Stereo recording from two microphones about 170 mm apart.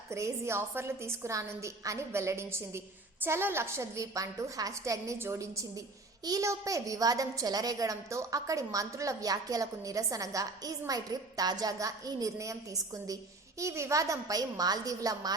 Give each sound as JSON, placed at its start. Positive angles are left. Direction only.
{"t": 0.1, "sound": "a woman's voice", "side_deg": -15}